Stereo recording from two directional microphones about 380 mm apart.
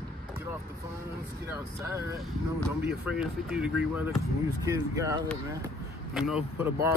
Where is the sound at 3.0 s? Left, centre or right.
Centre.